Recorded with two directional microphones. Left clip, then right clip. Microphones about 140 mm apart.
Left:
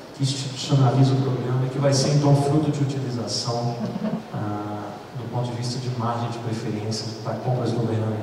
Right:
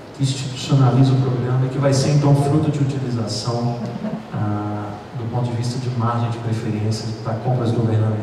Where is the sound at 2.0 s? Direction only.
35° left (ahead or behind).